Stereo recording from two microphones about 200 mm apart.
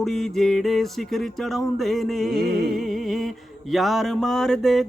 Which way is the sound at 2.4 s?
55° right (ahead or behind).